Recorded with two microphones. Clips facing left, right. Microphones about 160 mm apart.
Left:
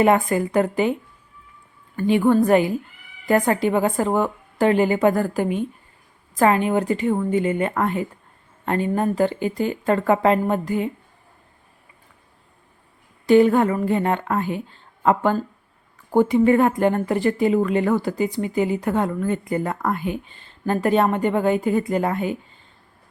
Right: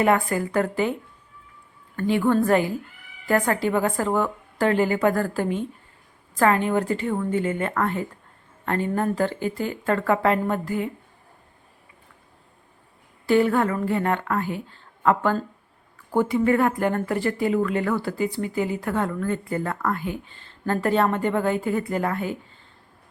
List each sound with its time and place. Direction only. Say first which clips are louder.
0.0 s speech: left 3 dB; 20° left (ahead or behind)
2.0 s a woman's voice: left 3 dB; 15° left (ahead or behind)
13.2 s speech: left 5 dB; 20° left (ahead or behind)